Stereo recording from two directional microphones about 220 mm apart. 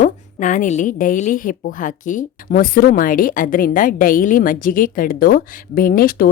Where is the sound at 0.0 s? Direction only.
35° left (ahead or behind).